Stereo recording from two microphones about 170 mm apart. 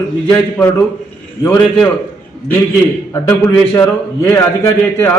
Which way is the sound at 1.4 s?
10° left (ahead or behind).